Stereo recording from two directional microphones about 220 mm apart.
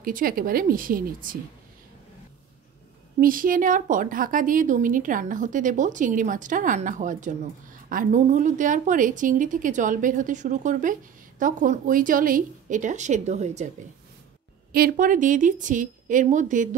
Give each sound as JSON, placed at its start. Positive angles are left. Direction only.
{"t": 0.0, "sound": "a woman's voice", "side_deg": -40}
{"t": 3.2, "sound": "a woman's voice", "side_deg": -40}
{"t": 14.7, "sound": "a woman's voice", "side_deg": -40}